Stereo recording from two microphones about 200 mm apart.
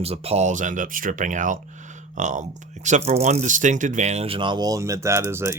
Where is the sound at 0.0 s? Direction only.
30° right (ahead or behind).